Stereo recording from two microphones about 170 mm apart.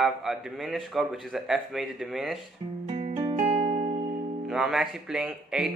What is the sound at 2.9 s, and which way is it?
Music, 40° right (ahead or behind).